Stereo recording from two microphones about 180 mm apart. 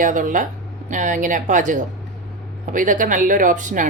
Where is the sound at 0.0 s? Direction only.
45° right (ahead or behind).